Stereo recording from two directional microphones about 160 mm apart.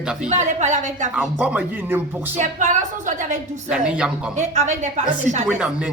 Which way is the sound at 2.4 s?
50° right (ahead or behind).